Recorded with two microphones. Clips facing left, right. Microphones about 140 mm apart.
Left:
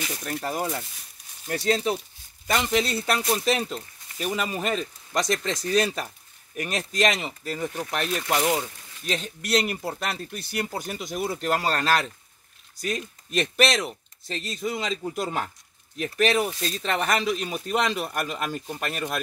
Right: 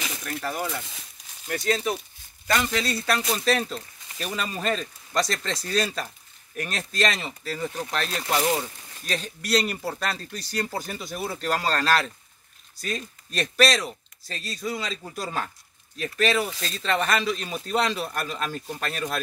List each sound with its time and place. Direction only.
0.2 s speech: 25° left (ahead or behind)
2.4 s speech: 20° left (ahead or behind)